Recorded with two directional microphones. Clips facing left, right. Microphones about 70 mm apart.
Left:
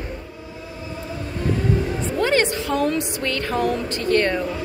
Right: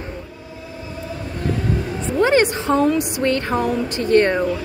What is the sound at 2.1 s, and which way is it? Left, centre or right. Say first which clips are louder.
A woman's voice: right 5 dB; right.